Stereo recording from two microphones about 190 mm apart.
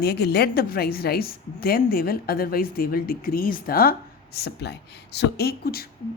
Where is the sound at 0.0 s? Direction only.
60° left (ahead or behind).